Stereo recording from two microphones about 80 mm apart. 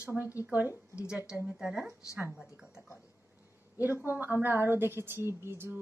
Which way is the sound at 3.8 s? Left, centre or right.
Right.